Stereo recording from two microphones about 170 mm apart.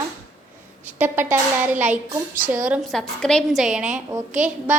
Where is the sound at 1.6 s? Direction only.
10° right (ahead or behind).